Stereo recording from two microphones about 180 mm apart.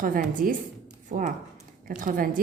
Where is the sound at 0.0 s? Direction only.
50° right (ahead or behind).